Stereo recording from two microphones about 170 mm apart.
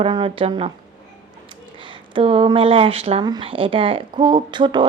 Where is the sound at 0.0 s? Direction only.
30° right (ahead or behind).